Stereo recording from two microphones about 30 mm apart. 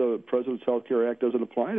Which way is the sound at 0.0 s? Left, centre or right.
Centre.